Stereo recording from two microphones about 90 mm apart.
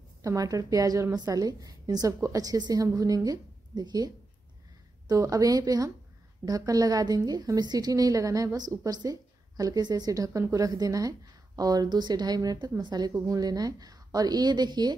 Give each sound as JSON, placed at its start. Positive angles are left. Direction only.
{"t": 0.2, "sound": "a woman's voice", "side_deg": -40}